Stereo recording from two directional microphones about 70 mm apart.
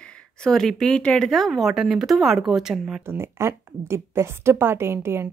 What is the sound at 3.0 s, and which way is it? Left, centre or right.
A woman's voice, right.